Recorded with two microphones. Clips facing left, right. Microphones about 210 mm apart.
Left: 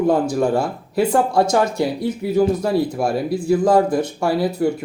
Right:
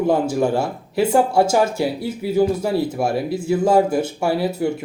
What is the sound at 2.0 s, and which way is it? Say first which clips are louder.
Speech: left 1 dB; 25° right (ahead or behind).